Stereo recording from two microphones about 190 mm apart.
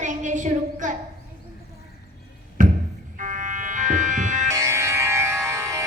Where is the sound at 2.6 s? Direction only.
45° right (ahead or behind).